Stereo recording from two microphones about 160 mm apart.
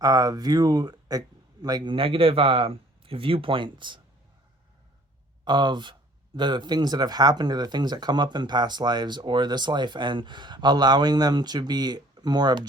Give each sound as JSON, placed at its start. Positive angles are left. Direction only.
{"t": 0.0, "sound": "speech", "side_deg": -20}
{"t": 5.5, "sound": "speech", "side_deg": -30}